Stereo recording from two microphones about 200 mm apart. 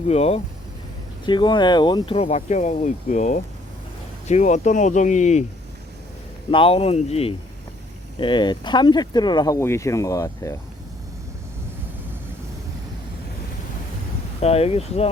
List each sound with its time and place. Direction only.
0.1 s speech: 30° left (ahead or behind)
6.5 s speech: 25° left (ahead or behind)
14.4 s speech: 30° left (ahead or behind)